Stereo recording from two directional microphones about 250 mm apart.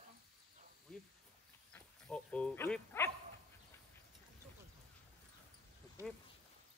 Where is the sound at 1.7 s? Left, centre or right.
Centre.